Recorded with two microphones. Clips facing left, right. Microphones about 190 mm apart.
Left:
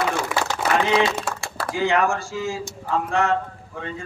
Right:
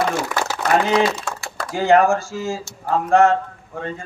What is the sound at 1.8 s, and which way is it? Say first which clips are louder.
A man's voice: right 6 dB; 45° right (ahead or behind).